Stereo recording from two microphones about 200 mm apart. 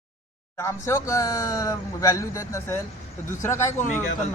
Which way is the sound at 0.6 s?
15° left (ahead or behind).